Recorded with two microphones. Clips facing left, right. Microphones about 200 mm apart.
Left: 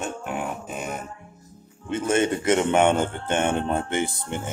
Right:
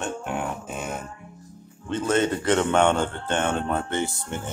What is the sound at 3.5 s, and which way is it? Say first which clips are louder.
Speech: left 1 dB; 25° left (ahead or behind).